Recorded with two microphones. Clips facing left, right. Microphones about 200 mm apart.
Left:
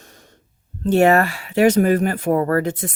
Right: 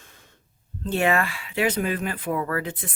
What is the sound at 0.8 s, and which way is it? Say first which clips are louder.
Speech: left 8 dB; 45° left (ahead or behind).